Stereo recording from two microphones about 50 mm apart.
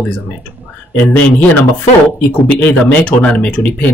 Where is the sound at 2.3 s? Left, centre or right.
Left.